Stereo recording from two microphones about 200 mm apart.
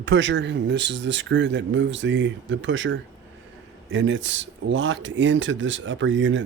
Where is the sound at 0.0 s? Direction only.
65° right (ahead or behind).